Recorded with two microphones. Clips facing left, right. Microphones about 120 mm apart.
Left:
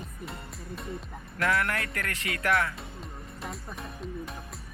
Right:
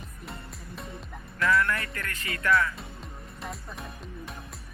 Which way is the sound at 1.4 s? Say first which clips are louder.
Right 2 dB; 65° left (ahead or behind).